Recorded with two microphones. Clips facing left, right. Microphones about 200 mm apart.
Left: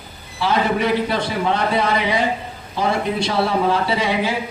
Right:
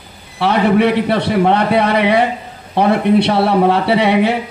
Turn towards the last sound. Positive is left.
turn(degrees=-65)  # may be behind; listen again after turning